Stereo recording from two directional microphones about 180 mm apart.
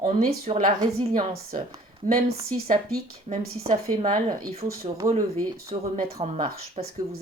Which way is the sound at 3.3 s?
35° right (ahead or behind).